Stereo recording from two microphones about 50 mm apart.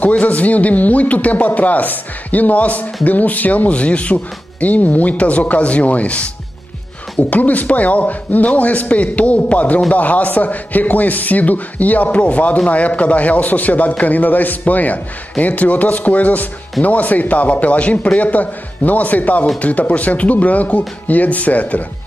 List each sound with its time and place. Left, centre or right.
0.0 s a man's voice: left